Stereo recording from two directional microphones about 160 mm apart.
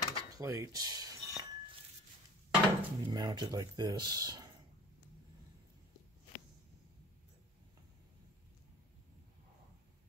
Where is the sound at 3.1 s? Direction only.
25° right (ahead or behind).